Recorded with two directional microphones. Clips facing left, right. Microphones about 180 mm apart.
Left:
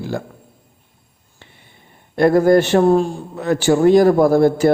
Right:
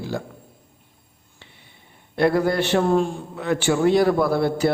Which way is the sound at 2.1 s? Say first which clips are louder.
Left 7 dB; 45° left (ahead or behind).